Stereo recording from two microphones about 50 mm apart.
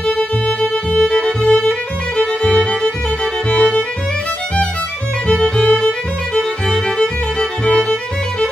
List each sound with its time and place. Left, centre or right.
0.0 s music: centre
5.4 s music: left
5.8 s music: centre